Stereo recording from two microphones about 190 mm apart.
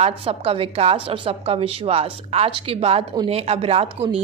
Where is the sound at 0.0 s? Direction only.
30° right (ahead or behind).